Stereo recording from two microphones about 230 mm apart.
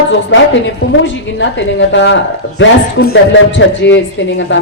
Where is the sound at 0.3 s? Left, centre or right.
Left.